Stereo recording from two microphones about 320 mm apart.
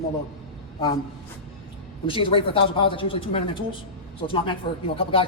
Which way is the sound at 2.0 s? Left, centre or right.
Centre.